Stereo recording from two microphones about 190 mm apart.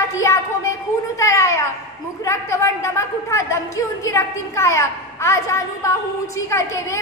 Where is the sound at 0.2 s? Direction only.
15° left (ahead or behind).